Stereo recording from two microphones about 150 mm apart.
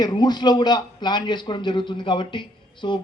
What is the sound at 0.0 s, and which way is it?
A man's voice, 30° left (ahead or behind).